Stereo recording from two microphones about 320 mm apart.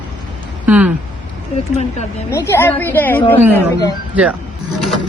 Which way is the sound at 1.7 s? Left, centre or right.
Left.